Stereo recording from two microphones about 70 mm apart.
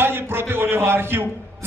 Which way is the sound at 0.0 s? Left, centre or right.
Right.